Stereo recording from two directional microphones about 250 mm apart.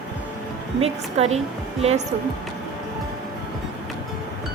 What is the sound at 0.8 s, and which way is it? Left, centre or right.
Speech, right.